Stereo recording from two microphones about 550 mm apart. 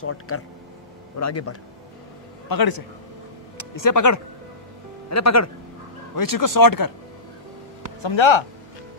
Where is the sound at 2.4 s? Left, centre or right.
Left.